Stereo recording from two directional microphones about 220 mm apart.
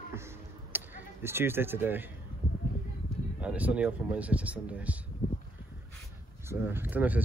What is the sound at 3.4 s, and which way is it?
Speech, 5° right (ahead or behind).